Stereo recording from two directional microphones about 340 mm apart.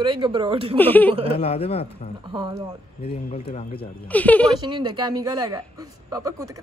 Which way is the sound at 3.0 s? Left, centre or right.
Centre.